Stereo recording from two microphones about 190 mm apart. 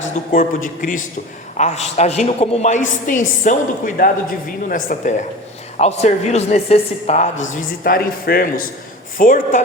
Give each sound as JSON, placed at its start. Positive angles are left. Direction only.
{"t": 0.0, "sound": "a woman's voice", "side_deg": 40}
{"t": 7.5, "sound": "a woman's voice", "side_deg": 50}